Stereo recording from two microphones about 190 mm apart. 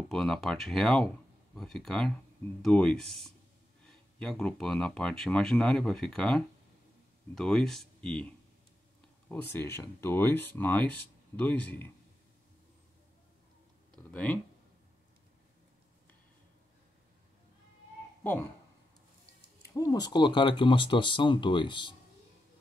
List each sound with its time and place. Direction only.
0.1 s speech: centre (ahead or behind)
9.3 s speech: 10° left (ahead or behind)
14.1 s speech: 10° left (ahead or behind)
19.6 s speech: 20° left (ahead or behind)